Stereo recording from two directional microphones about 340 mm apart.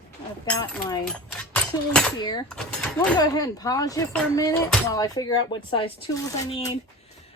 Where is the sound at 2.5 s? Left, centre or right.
Centre.